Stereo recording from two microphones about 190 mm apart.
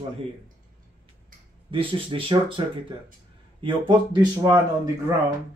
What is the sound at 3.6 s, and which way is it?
Speech, 25° right (ahead or behind).